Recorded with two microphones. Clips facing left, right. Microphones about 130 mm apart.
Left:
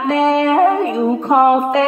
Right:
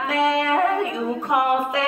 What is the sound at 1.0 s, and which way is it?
Female singing, 40° left (ahead or behind).